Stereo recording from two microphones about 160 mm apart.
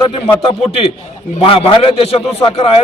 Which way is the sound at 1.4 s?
35° left (ahead or behind).